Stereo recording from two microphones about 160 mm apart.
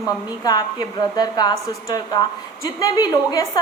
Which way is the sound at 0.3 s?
25° left (ahead or behind).